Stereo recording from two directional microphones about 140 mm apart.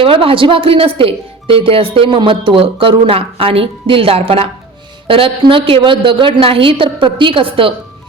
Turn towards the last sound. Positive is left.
turn(degrees=-40)  # may be behind; listen again after turning